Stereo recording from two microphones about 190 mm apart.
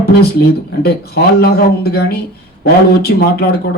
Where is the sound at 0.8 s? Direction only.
55° left (ahead or behind).